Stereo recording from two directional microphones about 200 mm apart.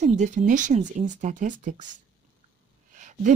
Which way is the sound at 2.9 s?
40° right (ahead or behind).